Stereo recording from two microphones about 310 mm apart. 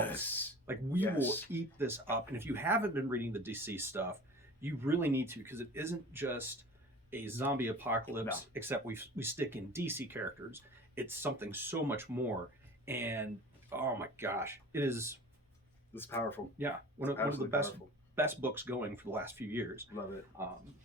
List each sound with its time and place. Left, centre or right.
0.0 s a sound: centre
0.7 s speech: centre
1.0 s speech: centre
1.5 s speech: centre
15.9 s speech: centre
16.6 s speech: centre
17.2 s speech: centre
17.5 s speech: centre